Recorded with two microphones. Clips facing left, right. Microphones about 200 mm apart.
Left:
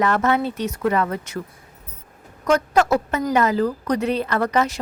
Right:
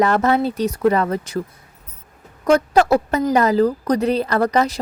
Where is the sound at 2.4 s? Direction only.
30° right (ahead or behind).